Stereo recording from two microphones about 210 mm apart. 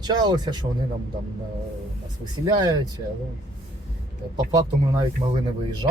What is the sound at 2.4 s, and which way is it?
Speech, 20° right (ahead or behind).